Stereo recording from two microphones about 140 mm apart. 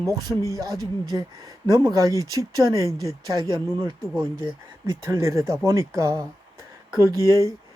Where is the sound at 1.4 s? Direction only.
25° right (ahead or behind).